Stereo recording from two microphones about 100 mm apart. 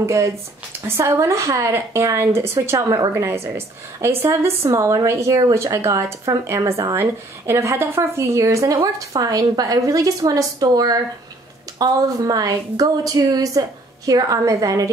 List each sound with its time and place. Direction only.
0.0 s a woman's voice: 30° right (ahead or behind)